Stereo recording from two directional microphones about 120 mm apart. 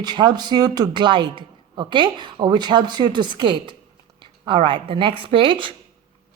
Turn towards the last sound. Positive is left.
turn(degrees=-45)  # may be behind; listen again after turning